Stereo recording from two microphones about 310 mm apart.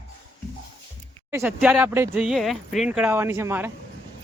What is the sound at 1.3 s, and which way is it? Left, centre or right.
Speech, centre.